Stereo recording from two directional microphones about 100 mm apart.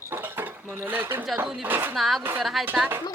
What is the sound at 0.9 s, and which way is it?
Speech, 20° right (ahead or behind).